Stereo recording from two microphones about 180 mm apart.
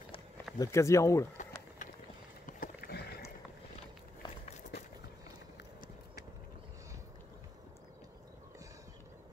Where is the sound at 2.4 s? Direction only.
50° left (ahead or behind).